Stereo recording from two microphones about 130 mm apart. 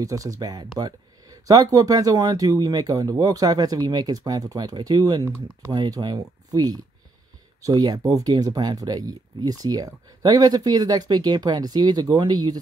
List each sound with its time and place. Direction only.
0.0 s speech: 25° right (ahead or behind)